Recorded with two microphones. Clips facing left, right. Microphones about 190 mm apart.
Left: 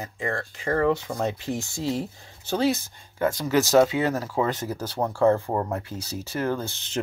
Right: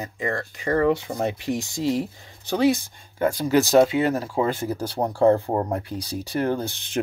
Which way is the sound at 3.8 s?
25° right (ahead or behind).